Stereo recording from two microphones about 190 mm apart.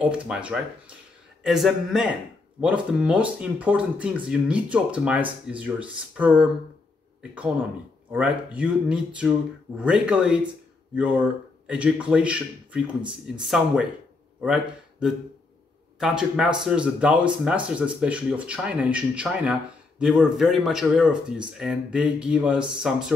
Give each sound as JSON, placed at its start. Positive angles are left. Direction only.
{"t": 0.0, "sound": "speech", "side_deg": -5}
{"t": 8.1, "sound": "speech", "side_deg": -5}